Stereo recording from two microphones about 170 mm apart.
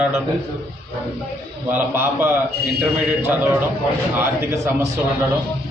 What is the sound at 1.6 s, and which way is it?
Speech, 10° right (ahead or behind).